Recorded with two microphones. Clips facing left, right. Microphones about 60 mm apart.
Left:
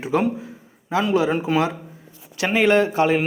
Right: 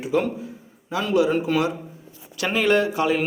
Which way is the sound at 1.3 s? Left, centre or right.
Centre.